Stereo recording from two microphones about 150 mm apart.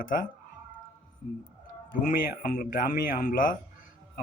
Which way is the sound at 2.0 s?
55° left (ahead or behind).